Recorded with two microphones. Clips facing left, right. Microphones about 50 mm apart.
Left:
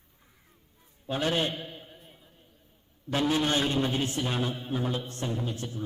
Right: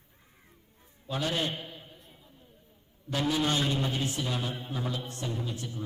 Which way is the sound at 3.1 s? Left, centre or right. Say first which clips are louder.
Left 2 dB; left.